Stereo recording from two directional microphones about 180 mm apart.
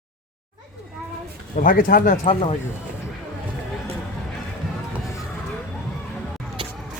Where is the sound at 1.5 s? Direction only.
50° left (ahead or behind).